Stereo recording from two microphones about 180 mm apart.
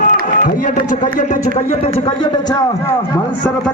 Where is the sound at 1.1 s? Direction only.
40° left (ahead or behind); by 2.9 s 20° left (ahead or behind).